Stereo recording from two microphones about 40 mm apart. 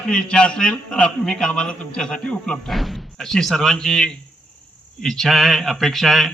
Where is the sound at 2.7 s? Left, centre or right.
Centre.